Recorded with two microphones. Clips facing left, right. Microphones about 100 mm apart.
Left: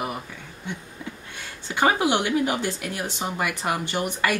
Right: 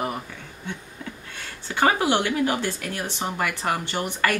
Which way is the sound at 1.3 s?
15° left (ahead or behind).